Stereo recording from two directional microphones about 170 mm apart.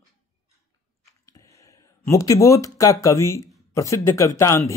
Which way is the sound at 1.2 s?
20° left (ahead or behind).